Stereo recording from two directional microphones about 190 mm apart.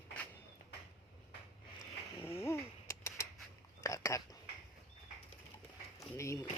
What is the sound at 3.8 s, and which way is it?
Whispering, 15° left (ahead or behind).